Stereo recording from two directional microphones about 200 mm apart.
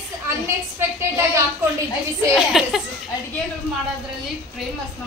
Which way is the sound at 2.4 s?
Centre (ahead or behind).